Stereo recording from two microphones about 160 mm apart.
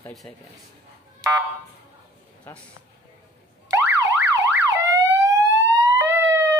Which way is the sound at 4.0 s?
20° right (ahead or behind).